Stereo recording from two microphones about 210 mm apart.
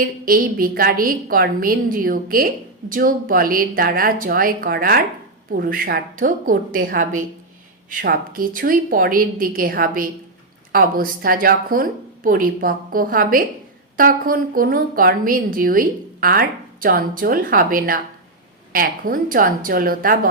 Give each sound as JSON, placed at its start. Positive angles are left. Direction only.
{"t": 0.0, "sound": "a woman's voice", "side_deg": -45}